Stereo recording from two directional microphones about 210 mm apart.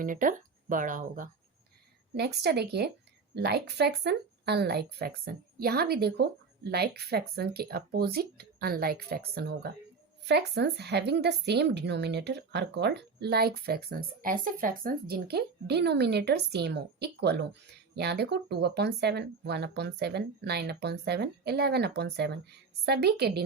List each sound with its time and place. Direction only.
0.0 s speech: 40° right (ahead or behind)
2.1 s speech: 50° right (ahead or behind)